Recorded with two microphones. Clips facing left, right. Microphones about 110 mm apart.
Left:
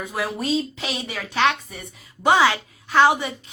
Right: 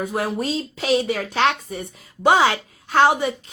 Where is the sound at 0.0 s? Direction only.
45° right (ahead or behind).